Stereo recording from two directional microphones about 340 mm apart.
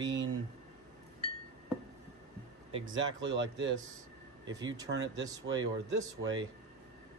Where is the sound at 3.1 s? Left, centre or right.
Right.